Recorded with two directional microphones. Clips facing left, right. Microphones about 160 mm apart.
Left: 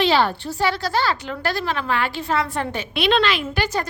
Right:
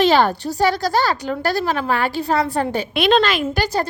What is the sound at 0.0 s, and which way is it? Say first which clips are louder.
A woman's voice: right 3 dB; 45° right (ahead or behind).